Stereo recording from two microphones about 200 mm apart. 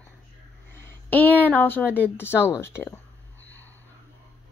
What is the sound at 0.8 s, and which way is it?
Speech, 10° left (ahead or behind).